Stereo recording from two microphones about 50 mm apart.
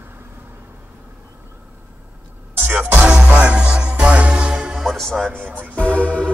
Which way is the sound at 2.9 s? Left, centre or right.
Right.